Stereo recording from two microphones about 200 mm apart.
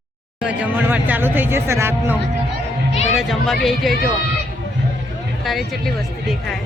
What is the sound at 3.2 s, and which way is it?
Speech, centre (ahead or behind).